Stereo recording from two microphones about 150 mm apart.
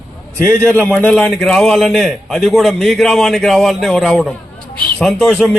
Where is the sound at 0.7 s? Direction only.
5° left (ahead or behind).